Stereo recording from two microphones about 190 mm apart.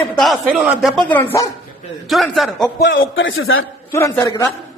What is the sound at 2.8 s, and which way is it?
Speech, 75° left (ahead or behind).